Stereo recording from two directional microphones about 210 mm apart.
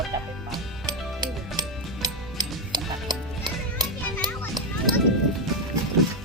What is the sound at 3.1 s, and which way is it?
Music, 20° right (ahead or behind).